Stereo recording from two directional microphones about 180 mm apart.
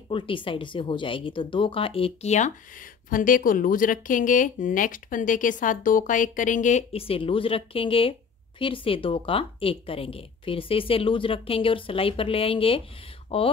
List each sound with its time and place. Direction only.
0.1 s speech: 30° left (ahead or behind)